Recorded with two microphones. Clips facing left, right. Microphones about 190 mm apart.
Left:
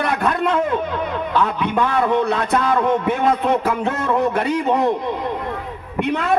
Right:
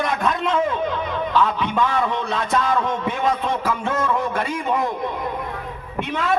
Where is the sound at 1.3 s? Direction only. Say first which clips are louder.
Even; 55° left (ahead or behind).